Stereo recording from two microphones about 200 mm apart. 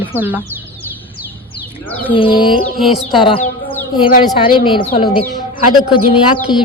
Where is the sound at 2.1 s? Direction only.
25° left (ahead or behind).